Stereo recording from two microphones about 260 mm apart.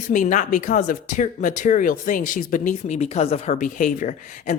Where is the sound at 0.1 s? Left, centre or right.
Left.